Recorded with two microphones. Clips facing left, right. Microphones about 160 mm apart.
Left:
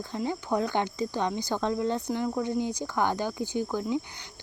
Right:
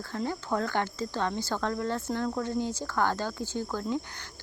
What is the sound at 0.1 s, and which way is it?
Speech, 15° left (ahead or behind).